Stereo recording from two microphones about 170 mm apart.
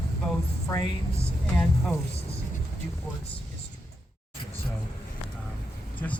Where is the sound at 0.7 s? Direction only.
20° left (ahead or behind).